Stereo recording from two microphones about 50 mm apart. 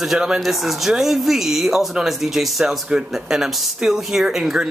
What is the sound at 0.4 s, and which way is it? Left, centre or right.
Speech, centre.